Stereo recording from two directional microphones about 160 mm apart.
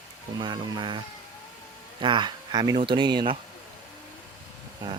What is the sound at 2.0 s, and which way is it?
Speech, 30° right (ahead or behind).